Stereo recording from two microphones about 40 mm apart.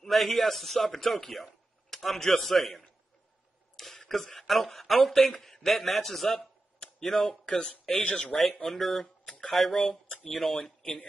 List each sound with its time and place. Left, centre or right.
0.0 s a man's voice: centre
1.3 s a sound: centre
2.3 s a man's voice: centre
8.0 s speech: left
8.6 s a man's voice: centre
9.2 s a sound: left
9.5 s a man's voice: centre